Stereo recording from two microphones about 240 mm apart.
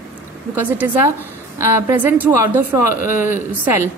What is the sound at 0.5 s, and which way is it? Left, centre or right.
Speech, centre.